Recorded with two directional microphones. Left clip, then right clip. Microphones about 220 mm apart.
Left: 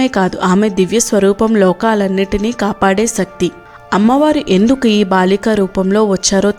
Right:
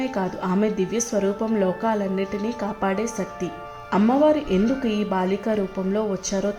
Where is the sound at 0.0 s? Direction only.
35° left (ahead or behind).